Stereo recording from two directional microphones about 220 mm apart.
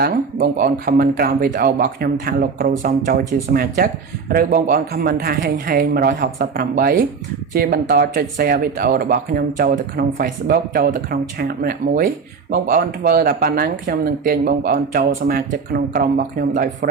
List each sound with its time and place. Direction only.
0.0 s speech: 45° right (ahead or behind)